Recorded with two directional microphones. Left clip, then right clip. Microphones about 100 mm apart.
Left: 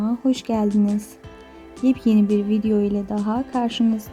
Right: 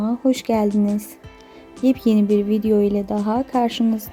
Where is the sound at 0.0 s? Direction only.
25° right (ahead or behind).